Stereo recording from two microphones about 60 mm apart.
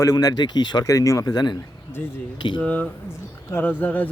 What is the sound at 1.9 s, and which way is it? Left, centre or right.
Speech, left.